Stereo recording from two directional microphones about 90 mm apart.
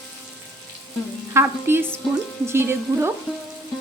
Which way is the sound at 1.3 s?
25° right (ahead or behind).